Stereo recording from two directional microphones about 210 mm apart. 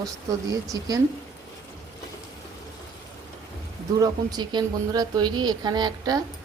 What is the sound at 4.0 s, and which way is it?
A woman's voice, 20° right (ahead or behind).